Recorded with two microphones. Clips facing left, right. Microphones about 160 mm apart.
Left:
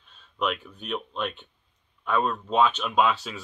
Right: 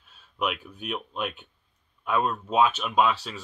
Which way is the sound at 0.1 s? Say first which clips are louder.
Left 1 dB; 5° right (ahead or behind).